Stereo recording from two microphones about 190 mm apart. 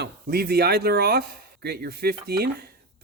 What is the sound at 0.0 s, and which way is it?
Speech, 55° right (ahead or behind).